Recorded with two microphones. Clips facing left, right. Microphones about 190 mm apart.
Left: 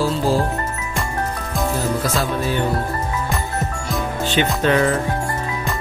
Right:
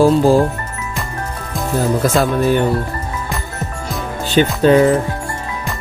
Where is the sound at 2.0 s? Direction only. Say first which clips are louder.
Right 7 dB; 50° right (ahead or behind).